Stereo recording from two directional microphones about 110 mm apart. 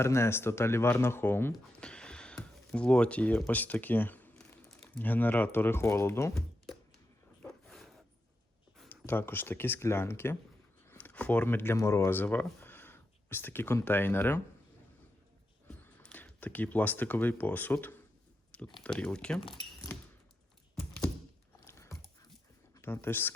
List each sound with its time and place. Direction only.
0.0 s speech: 25° left (ahead or behind)
1.5 s speech: 10° left (ahead or behind); by 6.3 s 25° left (ahead or behind)
7.4 s a sound: 5° left (ahead or behind)
8.9 s speech: 20° left (ahead or behind)
15.8 s speech: 15° left (ahead or behind)
20.7 s thunk: 10° left (ahead or behind)
21.6 s a sound: 25° left (ahead or behind)
22.7 s speech: 20° left (ahead or behind)